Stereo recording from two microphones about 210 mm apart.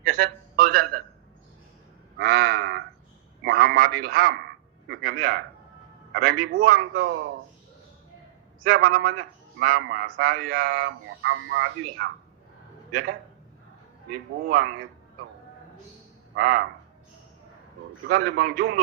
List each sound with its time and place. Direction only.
0.0 s a sound: 45° right (ahead or behind)
2.1 s crow: 45° right (ahead or behind)
3.4 s radio: 50° right (ahead or behind)
4.9 s a man's voice: 45° right (ahead or behind)
8.6 s a man's voice: 45° right (ahead or behind)
14.4 s a man's voice: 50° right (ahead or behind)
16.3 s a man's voice: 45° right (ahead or behind)
18.1 s a man's voice: 50° right (ahead or behind)